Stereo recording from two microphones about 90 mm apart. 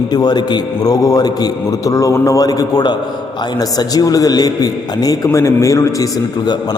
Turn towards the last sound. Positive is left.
turn(degrees=35)  # may be behind; listen again after turning